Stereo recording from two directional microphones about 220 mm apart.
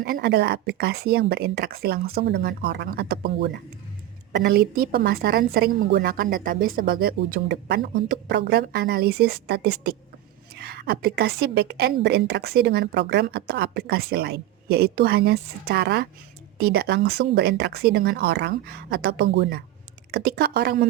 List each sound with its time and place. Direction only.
0.0 s a woman's voice: 45° right (ahead or behind)